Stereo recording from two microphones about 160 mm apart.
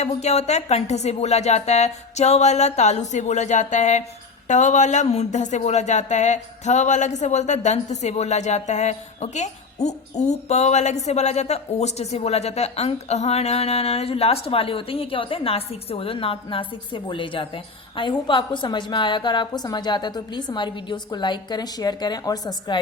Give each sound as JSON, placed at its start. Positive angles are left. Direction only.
{"t": 0.0, "sound": "a woman's voice", "side_deg": 45}